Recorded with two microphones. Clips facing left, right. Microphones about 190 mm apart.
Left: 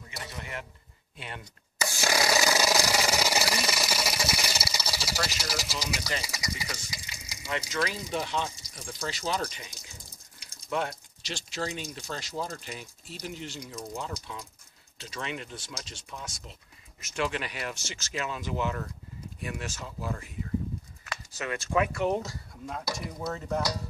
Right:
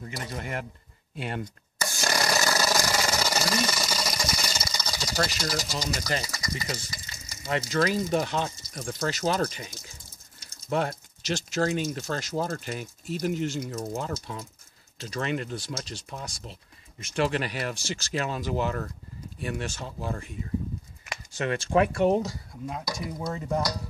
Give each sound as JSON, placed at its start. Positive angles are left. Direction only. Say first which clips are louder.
{"t": 0.2, "sound": "speech", "louder": "right 5 dB", "side_deg": -45}
{"t": 1.8, "sound": "wood", "louder": "even", "side_deg": 5}
{"t": 6.2, "sound": "speech", "louder": "right 2 dB", "side_deg": 10}
{"t": 6.9, "sound": "stir", "louder": "even", "side_deg": 10}
{"t": 7.8, "sound": "speech", "louder": "right 8 dB", "side_deg": -45}
{"t": 21.7, "sound": "speech", "louder": "right 5 dB", "side_deg": -25}
{"t": 22.2, "sound": "speech", "louder": "right 6 dB", "side_deg": -5}
{"t": 23.1, "sound": "dishes", "louder": "right 3 dB", "side_deg": -15}